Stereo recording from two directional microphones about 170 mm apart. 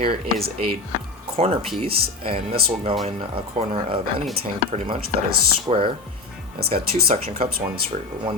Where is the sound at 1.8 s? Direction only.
35° right (ahead or behind).